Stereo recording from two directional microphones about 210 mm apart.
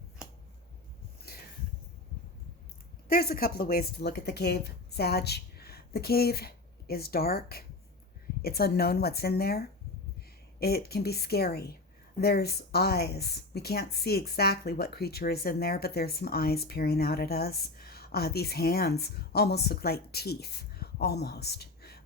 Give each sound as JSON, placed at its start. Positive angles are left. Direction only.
{"t": 3.1, "sound": "a woman's voice", "side_deg": 45}